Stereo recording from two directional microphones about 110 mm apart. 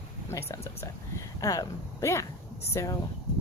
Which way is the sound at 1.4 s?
30° left (ahead or behind).